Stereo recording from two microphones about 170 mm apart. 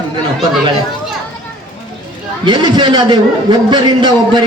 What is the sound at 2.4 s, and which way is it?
A man's voice, 25° right (ahead or behind).